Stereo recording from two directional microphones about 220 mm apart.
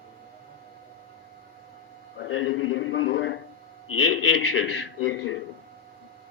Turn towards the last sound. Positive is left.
turn(degrees=65)  # may be behind; listen again after turning